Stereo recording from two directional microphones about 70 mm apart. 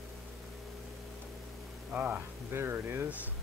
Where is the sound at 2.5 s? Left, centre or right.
Right.